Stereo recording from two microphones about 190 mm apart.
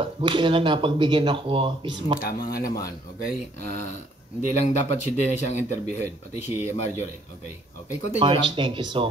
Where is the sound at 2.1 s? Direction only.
50° left (ahead or behind).